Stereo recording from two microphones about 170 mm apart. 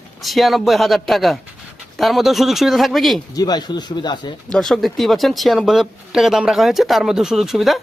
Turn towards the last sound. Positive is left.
turn(degrees=0)  # may be behind; listen again after turning